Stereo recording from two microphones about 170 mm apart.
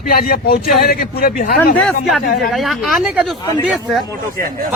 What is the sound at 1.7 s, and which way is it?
Speech, centre (ahead or behind).